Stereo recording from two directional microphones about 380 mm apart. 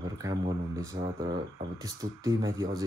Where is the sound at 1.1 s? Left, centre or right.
Right.